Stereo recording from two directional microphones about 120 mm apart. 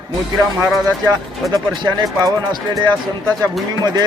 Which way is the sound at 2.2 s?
30° right (ahead or behind).